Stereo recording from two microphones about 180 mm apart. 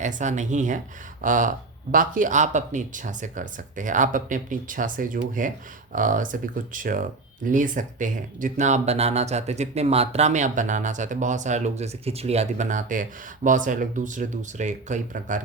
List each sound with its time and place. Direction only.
0.0 s speech: 40° right (ahead or behind)